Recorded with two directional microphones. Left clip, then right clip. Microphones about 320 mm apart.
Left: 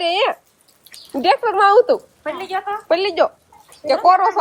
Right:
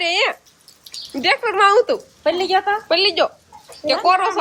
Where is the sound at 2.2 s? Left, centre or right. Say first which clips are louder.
Right 7 dB; right.